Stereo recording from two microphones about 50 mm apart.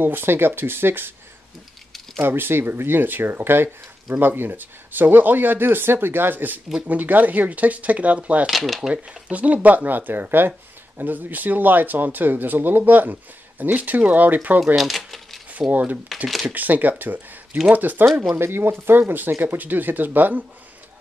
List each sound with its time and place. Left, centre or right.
0.0 s speech: right
2.2 s speech: right
8.5 s speech: centre
8.9 s speech: right
14.8 s a sound: centre
15.7 s speech: right
16.3 s speech: centre
16.5 s speech: right
18.3 s speech: right